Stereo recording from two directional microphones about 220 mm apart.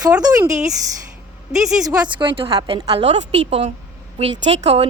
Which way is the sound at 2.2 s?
25° right (ahead or behind).